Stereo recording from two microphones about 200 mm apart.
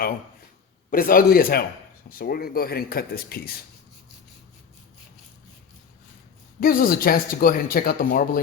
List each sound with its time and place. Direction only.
0.9 s speech: 45° left (ahead or behind)
6.6 s speech: 45° left (ahead or behind)